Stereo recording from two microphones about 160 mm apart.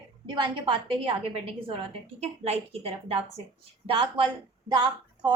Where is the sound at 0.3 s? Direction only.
30° right (ahead or behind).